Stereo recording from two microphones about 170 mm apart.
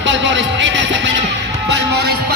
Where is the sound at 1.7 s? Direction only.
75° right (ahead or behind).